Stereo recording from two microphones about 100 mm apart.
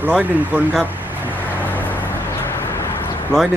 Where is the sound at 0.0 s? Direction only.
15° right (ahead or behind).